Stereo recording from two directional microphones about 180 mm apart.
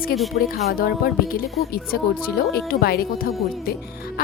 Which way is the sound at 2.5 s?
55° left (ahead or behind).